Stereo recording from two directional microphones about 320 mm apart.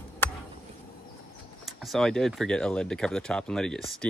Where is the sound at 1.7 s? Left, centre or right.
Centre.